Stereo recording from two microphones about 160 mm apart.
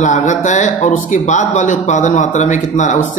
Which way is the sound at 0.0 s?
50° left (ahead or behind).